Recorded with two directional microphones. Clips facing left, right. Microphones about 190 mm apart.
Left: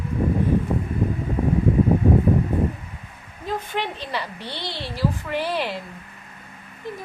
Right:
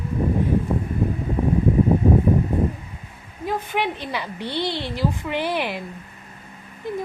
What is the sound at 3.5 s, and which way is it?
Speech, 15° right (ahead or behind).